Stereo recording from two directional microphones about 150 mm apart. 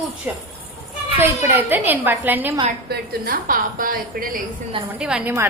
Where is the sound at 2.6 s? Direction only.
80° right.